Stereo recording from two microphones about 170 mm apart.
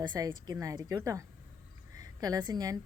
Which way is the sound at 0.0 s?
25° right (ahead or behind).